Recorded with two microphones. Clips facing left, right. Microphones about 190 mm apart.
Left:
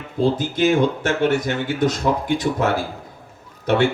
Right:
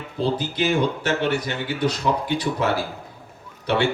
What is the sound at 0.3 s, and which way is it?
A man's voice, 50° left (ahead or behind).